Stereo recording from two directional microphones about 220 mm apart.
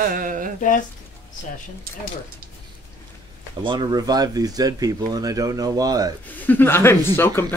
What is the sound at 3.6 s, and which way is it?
Speech, 20° right (ahead or behind).